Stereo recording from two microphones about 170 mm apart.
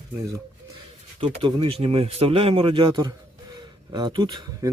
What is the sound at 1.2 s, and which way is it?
Speech, 25° right (ahead or behind).